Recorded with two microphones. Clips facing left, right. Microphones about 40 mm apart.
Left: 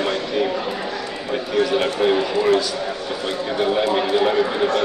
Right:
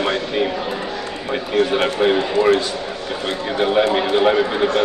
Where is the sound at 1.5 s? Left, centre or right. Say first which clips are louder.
Right 2 dB; right.